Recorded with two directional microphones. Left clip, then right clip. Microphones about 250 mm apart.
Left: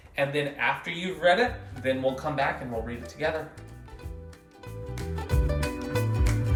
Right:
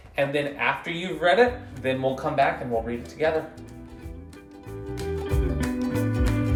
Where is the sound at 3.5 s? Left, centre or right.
Centre.